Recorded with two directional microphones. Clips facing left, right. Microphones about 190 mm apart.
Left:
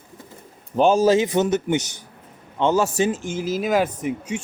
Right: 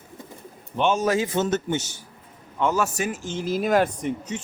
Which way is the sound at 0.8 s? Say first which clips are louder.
Left 6 dB; 35° left (ahead or behind).